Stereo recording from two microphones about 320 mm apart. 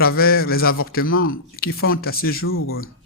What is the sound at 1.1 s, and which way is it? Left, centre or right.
Speech, left.